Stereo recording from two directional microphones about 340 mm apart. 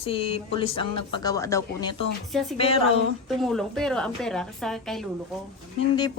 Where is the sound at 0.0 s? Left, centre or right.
Centre.